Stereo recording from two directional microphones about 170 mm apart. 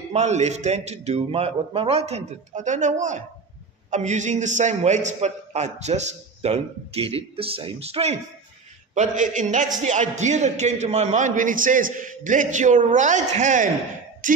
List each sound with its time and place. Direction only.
0.1 s a man's voice: 40° right (ahead or behind)
14.2 s music: 50° right (ahead or behind)